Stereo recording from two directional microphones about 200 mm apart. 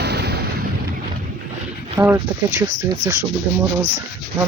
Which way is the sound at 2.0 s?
15° right (ahead or behind).